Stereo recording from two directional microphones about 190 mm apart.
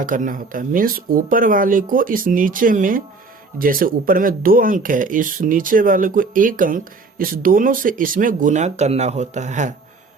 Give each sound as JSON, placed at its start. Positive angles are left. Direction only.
{"t": 0.0, "sound": "speech", "side_deg": -45}